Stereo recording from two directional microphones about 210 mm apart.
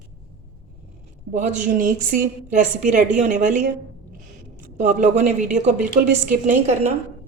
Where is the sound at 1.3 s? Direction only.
35° right (ahead or behind).